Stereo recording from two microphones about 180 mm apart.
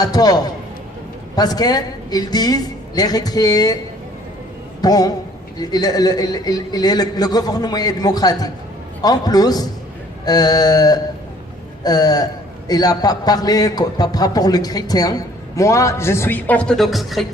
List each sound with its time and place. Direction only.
0.0 s a man's voice: 20° left (ahead or behind)
4.8 s a man's voice: 20° left (ahead or behind); by 17.2 s centre (ahead or behind)